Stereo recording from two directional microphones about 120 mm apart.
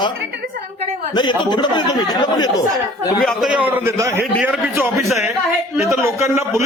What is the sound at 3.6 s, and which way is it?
Speech, 15° right (ahead or behind).